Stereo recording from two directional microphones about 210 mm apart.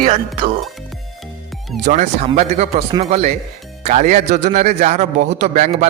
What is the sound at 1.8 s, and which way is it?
A man's voice, 35° right (ahead or behind).